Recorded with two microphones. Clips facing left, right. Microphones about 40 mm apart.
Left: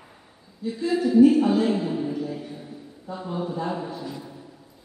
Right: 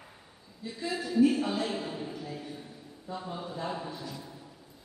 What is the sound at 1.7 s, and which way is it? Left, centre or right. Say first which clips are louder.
Speech: left 10 dB; centre.